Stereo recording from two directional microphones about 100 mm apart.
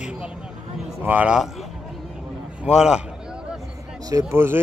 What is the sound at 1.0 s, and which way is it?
Speech, 15° right (ahead or behind).